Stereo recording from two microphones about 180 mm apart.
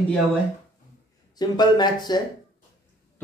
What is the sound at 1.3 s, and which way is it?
Speech, 25° left (ahead or behind).